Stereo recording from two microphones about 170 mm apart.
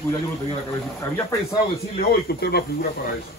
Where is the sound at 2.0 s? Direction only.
65° left (ahead or behind).